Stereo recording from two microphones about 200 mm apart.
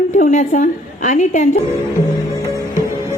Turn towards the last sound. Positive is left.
turn(degrees=35)  # may be behind; listen again after turning